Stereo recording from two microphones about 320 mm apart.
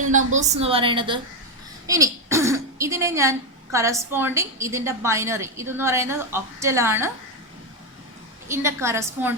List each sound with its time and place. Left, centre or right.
0.3 s speech: right
8.4 s speech: centre